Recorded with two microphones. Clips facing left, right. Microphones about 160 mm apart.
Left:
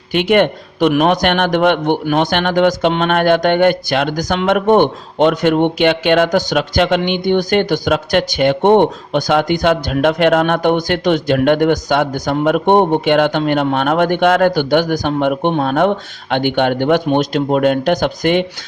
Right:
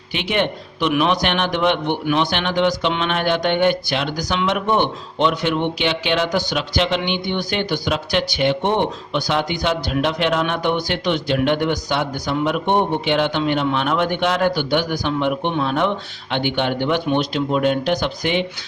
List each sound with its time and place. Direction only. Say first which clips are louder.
0.1 s a man's voice: left 9 dB; 50° left (ahead or behind)